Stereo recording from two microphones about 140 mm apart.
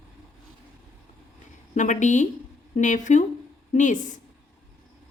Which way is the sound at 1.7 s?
60° left (ahead or behind).